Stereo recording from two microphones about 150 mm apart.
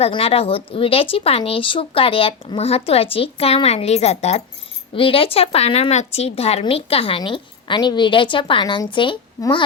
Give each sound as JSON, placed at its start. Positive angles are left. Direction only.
{"t": 0.0, "sound": "a woman's voice", "side_deg": 40}